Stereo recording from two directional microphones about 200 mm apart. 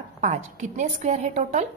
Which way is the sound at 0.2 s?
35° right (ahead or behind).